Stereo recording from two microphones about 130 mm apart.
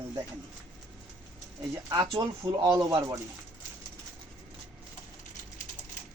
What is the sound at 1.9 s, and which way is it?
Speech, 30° right (ahead or behind).